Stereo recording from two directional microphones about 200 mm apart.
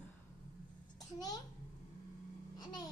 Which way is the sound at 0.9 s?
20° left (ahead or behind).